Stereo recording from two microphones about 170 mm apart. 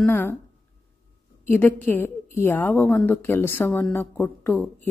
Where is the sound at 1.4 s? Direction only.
10° left (ahead or behind).